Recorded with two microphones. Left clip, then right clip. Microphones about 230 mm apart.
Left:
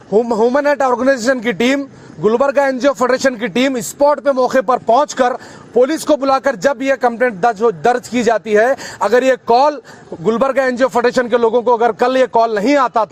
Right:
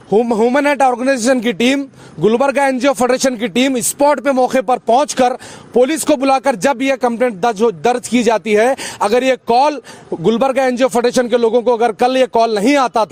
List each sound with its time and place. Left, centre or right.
0.1 s a man's voice: right